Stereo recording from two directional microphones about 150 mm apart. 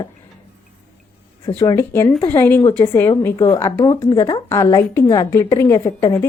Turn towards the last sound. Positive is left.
turn(degrees=20)  # may be behind; listen again after turning